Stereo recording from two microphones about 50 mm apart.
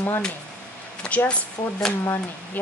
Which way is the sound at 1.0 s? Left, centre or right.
Centre.